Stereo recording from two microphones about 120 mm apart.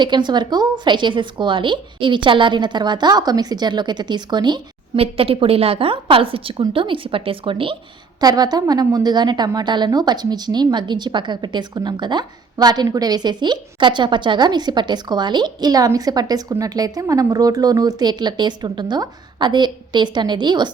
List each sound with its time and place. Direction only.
0.0 s a woman's voice: 40° right (ahead or behind)
4.9 s a woman's voice: 50° right (ahead or behind)
8.2 s a woman's voice: 35° right (ahead or behind)